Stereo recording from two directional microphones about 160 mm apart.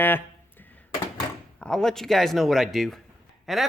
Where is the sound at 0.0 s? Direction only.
10° left (ahead or behind).